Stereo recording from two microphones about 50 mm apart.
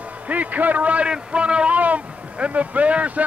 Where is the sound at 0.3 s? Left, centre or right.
Right.